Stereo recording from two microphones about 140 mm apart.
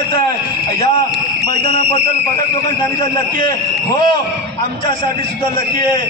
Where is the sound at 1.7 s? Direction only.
50° left (ahead or behind).